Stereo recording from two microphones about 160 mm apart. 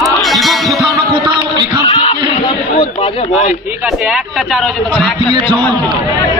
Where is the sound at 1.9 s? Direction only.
35° left (ahead or behind).